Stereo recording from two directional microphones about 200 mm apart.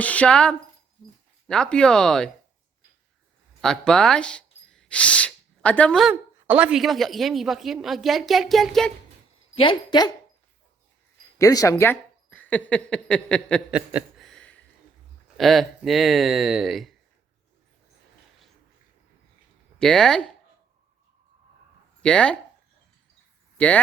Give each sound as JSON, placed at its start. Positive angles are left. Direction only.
{"t": 0.0, "sound": "speech", "side_deg": 5}
{"t": 3.6, "sound": "speech", "side_deg": 5}
{"t": 9.6, "sound": "speech", "side_deg": 25}
{"t": 11.3, "sound": "speech", "side_deg": 15}
{"t": 13.7, "sound": "a sound", "side_deg": -5}
{"t": 15.4, "sound": "speech", "side_deg": 0}
{"t": 19.8, "sound": "speech", "side_deg": 5}
{"t": 22.0, "sound": "speech", "side_deg": 5}
{"t": 23.6, "sound": "speech", "side_deg": 5}